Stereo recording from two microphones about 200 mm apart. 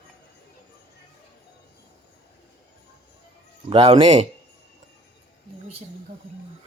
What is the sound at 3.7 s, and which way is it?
Speech, 25° right (ahead or behind).